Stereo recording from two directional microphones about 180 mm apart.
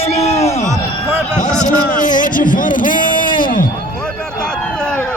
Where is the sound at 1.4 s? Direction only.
45° left (ahead or behind).